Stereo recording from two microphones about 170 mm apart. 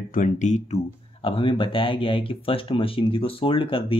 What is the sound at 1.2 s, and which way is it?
Speech, 30° left (ahead or behind).